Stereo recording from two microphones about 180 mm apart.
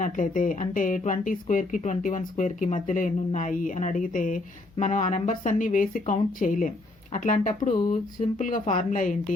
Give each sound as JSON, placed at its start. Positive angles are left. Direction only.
{"t": 0.0, "sound": "speech", "side_deg": 45}